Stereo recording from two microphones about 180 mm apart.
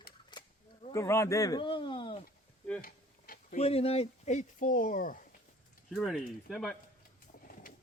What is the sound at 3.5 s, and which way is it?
Speech, 35° left (ahead or behind).